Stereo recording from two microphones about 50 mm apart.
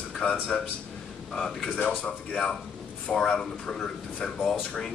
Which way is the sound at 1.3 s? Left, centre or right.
Centre.